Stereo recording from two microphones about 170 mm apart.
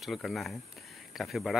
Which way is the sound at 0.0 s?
Centre (ahead or behind).